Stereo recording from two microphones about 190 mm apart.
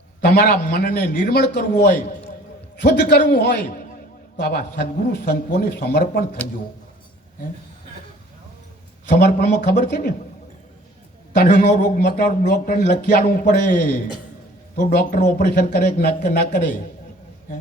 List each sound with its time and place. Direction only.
0.2 s a man's voice: 55° left (ahead or behind)
9.0 s speech: 55° left (ahead or behind)
11.7 s speech: 50° left (ahead or behind)